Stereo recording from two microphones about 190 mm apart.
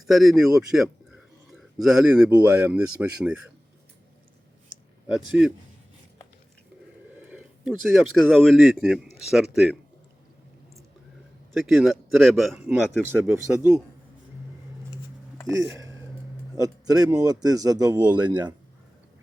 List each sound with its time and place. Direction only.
0.0 s speech: centre (ahead or behind)
7.3 s speech: 5° right (ahead or behind)
11.5 s speech: centre (ahead or behind)
13.1 s speech: 10° right (ahead or behind)
15.5 s speech: 15° right (ahead or behind)